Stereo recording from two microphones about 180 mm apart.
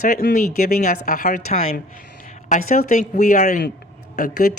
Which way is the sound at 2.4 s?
50° left (ahead or behind).